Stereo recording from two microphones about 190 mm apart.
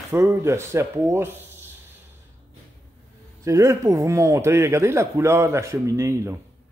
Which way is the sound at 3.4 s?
15° right (ahead or behind).